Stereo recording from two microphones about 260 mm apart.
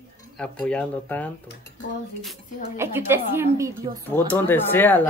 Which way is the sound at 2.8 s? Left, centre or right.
Centre.